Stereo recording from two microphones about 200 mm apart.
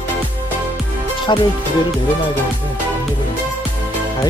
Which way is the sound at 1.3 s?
20° left (ahead or behind).